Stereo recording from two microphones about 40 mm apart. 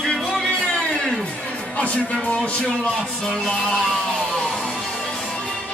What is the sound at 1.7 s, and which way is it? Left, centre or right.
Speech, left.